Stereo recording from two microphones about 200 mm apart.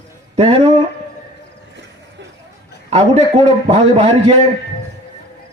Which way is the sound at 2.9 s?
35° right (ahead or behind).